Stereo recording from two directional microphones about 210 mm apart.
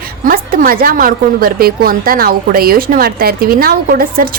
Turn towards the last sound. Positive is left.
turn(degrees=-45)  # may be behind; listen again after turning